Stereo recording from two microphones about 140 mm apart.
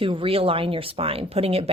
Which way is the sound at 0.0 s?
40° right (ahead or behind).